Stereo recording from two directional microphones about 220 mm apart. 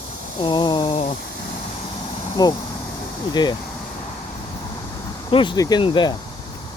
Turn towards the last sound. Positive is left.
turn(degrees=20)  # may be behind; listen again after turning